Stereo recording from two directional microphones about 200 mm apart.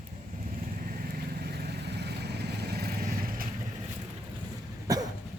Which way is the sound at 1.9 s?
55° right (ahead or behind).